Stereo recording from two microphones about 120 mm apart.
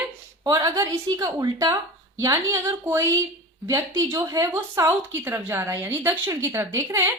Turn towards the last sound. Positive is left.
turn(degrees=-25)  # may be behind; listen again after turning